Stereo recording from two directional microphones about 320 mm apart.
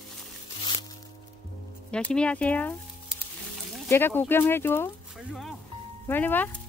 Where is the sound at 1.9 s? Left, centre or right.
Centre.